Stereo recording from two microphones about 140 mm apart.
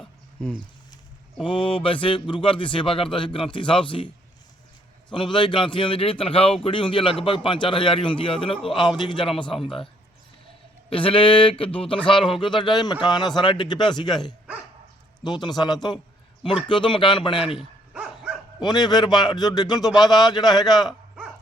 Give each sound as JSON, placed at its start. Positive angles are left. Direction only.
{"t": 0.4, "sound": "speech", "side_deg": 5}
{"t": 1.5, "sound": "a man's voice", "side_deg": 35}
{"t": 17.9, "sound": "dog", "side_deg": -10}
{"t": 18.6, "sound": "a man's voice", "side_deg": 30}